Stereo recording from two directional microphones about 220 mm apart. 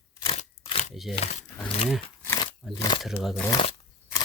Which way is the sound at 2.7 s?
20° left (ahead or behind).